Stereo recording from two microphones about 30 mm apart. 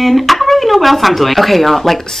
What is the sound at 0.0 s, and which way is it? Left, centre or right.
Speech, centre.